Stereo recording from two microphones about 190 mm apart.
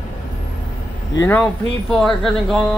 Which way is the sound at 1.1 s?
15° left (ahead or behind).